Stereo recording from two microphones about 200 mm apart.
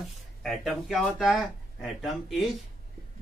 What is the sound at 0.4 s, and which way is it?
Speech, centre (ahead or behind).